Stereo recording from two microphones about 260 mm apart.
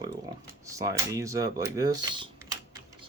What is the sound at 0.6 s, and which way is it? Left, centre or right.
Speech, centre.